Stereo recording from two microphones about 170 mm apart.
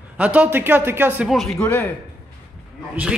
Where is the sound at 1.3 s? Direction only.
Centre (ahead or behind).